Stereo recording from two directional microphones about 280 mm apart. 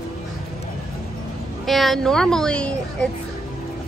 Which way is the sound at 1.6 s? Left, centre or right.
Centre.